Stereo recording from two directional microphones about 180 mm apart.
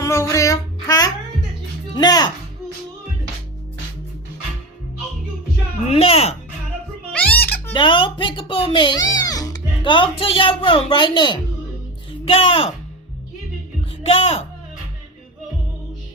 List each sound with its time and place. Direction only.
0.0 s music: 15° left (ahead or behind)
5.9 s a sound: 35° left (ahead or behind)
7.1 s music: 10° left (ahead or behind)
7.7 s music: 25° left (ahead or behind)
12.2 s a woman's voice: 30° left (ahead or behind)
14.1 s a woman's voice: 30° left (ahead or behind)